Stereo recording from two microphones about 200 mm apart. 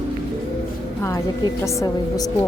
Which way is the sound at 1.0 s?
15° left (ahead or behind).